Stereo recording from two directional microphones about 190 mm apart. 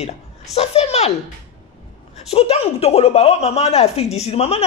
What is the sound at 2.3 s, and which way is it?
A man's voice, 35° left (ahead or behind).